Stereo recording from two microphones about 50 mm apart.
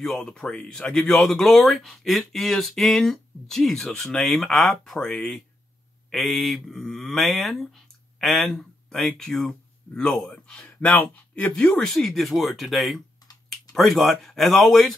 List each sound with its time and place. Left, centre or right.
0.0 s speech: centre
6.0 s speech: centre
10.5 s speech: left
11.5 s speech: centre